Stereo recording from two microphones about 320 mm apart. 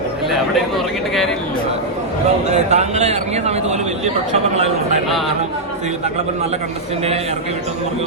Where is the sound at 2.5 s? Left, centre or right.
Right.